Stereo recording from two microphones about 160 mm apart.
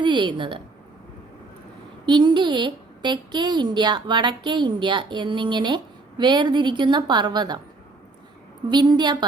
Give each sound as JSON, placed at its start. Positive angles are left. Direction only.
{"t": 0.0, "sound": "a woman's voice", "side_deg": -30}
{"t": 2.0, "sound": "a woman's voice", "side_deg": -30}
{"t": 8.7, "sound": "a woman's voice", "side_deg": -25}